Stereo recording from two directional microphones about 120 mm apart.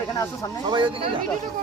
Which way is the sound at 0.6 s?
40° right (ahead or behind).